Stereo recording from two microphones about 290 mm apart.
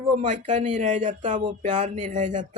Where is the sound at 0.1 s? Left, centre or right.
Right.